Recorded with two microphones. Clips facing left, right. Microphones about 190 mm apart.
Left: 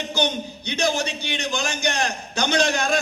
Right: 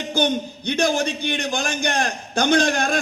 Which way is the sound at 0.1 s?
55° right (ahead or behind).